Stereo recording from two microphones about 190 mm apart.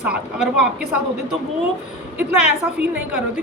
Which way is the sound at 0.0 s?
5° right (ahead or behind).